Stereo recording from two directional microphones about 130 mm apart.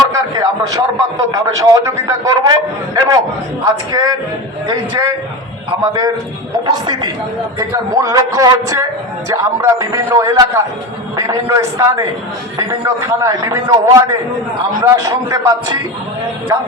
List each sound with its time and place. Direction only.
0.1 s a man's voice: 30° right (ahead or behind)